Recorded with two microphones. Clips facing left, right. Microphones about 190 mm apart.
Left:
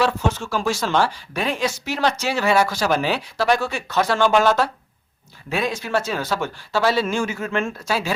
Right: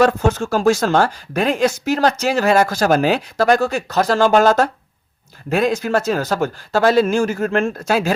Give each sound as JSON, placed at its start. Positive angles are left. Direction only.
{"t": 0.0, "sound": "speech", "side_deg": -45}